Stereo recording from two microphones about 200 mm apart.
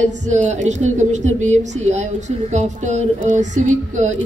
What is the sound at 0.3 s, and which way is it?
A woman's voice, 35° right (ahead or behind).